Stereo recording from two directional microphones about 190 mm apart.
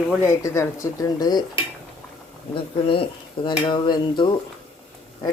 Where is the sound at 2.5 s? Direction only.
25° left (ahead or behind).